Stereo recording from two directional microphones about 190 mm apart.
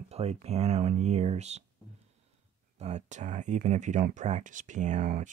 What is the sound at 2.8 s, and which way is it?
Speech, 35° right (ahead or behind).